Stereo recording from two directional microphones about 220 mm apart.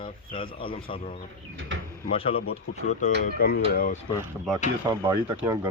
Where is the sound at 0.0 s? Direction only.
25° left (ahead or behind).